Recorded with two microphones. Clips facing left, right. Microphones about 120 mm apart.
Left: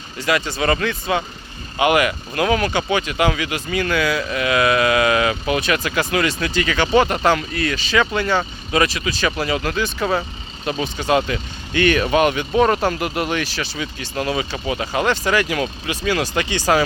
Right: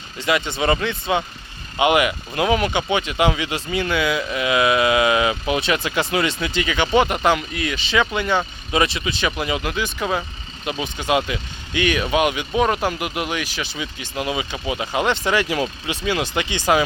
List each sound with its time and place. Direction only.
0.2 s speech: 20° right (ahead or behind)